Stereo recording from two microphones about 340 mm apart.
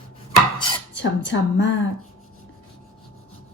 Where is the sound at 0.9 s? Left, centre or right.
Left.